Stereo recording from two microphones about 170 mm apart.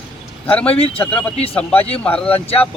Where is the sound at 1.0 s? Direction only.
10° left (ahead or behind).